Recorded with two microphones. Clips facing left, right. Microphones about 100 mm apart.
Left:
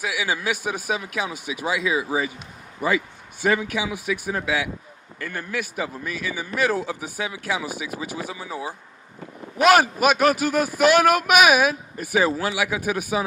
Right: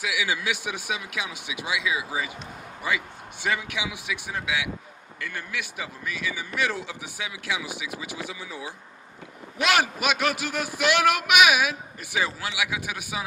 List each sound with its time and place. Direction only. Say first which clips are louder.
0.0 s a man's voice: left 2 dB; 40° left (ahead or behind)